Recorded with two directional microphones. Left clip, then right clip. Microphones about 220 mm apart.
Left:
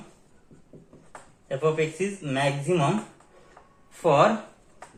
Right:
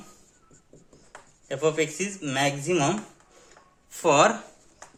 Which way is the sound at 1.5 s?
55° right (ahead or behind).